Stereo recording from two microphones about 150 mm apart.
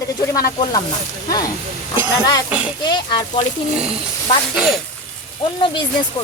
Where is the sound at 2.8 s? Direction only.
30° left (ahead or behind).